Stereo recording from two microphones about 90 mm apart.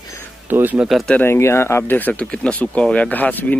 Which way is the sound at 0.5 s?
20° right (ahead or behind).